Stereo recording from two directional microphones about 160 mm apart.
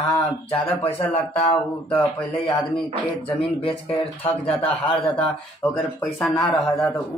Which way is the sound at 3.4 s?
35° left (ahead or behind).